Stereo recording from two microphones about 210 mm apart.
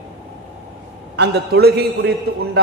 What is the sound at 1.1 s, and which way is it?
Speech, 50° right (ahead or behind).